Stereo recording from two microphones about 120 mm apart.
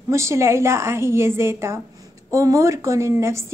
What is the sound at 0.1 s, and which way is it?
Speech, 25° right (ahead or behind).